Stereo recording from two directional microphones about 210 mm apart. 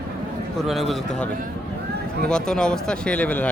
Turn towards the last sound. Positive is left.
turn(degrees=5)  # may be behind; listen again after turning